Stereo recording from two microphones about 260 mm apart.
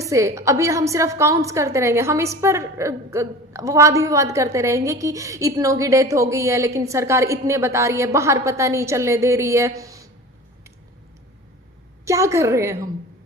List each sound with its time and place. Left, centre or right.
0.0 s a woman's voice: centre
12.0 s a woman's voice: centre